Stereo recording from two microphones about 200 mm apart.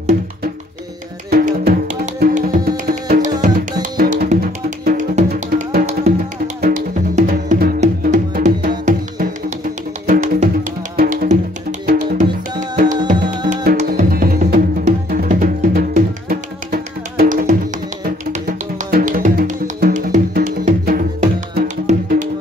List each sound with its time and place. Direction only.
1.3 s music: 50° right (ahead or behind)
5.9 s music: 35° right (ahead or behind)
18.9 s music: 45° right (ahead or behind)